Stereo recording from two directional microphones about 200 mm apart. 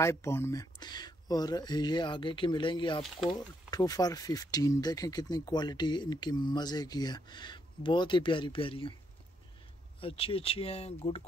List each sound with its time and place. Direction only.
0.0 s speech: 15° left (ahead or behind)
9.9 s speech: 25° left (ahead or behind)